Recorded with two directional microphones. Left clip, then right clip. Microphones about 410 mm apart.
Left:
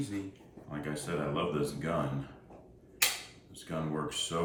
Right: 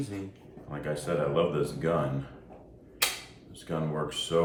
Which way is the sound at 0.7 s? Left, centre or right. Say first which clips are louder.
Right 6 dB; centre.